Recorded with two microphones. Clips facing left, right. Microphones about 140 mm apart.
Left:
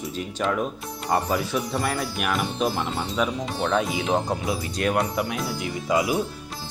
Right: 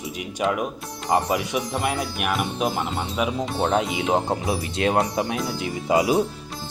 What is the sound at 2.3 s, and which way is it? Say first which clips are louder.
Speech: even; 5° right (ahead or behind).